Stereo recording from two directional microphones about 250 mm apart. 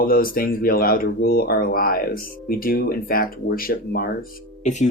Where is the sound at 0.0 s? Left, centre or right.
Left.